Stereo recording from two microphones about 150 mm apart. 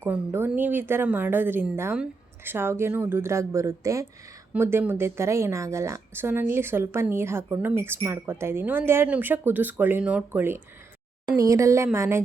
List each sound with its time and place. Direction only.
0.0 s a woman's voice: 15° right (ahead or behind)